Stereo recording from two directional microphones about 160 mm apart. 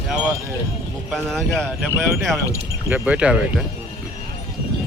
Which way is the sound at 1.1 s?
5° left (ahead or behind).